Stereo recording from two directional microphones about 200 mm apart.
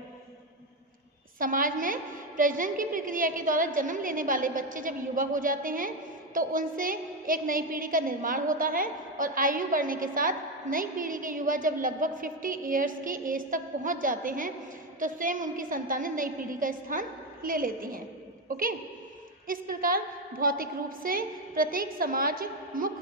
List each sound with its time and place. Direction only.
1.4 s a woman's voice: 45° right (ahead or behind)